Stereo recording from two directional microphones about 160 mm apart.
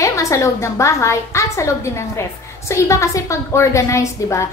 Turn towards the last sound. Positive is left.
turn(degrees=20)  # may be behind; listen again after turning